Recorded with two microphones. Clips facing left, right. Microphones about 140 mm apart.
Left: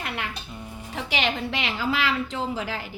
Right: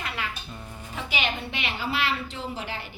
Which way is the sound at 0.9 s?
80° left.